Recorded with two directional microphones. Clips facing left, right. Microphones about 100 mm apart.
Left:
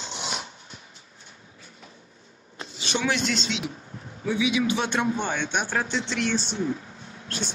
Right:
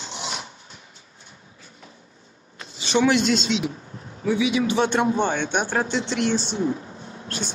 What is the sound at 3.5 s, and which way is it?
A man's voice, 30° right (ahead or behind).